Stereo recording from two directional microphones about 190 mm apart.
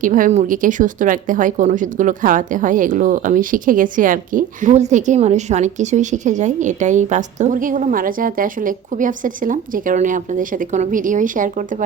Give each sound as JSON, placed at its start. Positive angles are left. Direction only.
{"t": 0.0, "sound": "speech", "side_deg": -45}